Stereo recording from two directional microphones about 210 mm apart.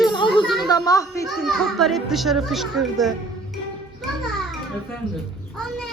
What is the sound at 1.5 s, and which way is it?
A woman's voice, centre (ahead or behind).